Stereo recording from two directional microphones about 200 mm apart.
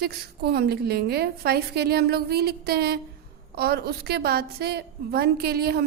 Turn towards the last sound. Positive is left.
turn(degrees=-50)  # may be behind; listen again after turning